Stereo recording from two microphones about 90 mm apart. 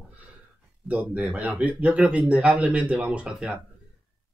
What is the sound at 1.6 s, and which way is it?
Speech, 15° right (ahead or behind).